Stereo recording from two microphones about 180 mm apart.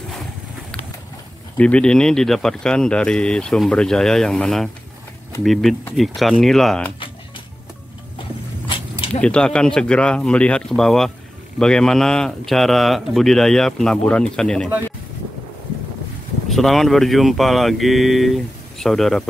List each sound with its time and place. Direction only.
1.6 s speech: 5° left (ahead or behind)
8.2 s a sound: 30° left (ahead or behind)
9.2 s speech: 5° left (ahead or behind)
16.4 s speech: centre (ahead or behind)